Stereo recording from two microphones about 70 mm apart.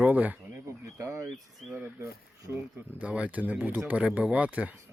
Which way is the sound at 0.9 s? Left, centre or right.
Right.